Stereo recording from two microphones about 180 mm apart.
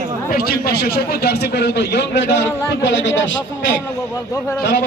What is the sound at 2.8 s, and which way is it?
Speech, 85° left.